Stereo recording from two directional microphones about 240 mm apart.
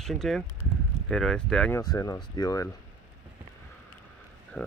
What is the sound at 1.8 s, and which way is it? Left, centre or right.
Speech, centre.